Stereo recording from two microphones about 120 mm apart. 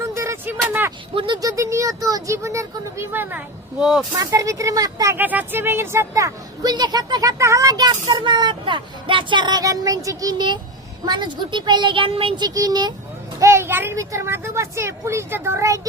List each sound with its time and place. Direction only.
0.1 s a sound: 25° right (ahead or behind)
1.4 s speech: 30° right (ahead or behind)
4.2 s a woman's voice: 25° right (ahead or behind)
5.1 s a woman's voice: 15° right (ahead or behind); by 12.5 s 50° right (ahead or behind)
12.5 s speech: 30° right (ahead or behind)
13.4 s a woman's voice: 20° right (ahead or behind)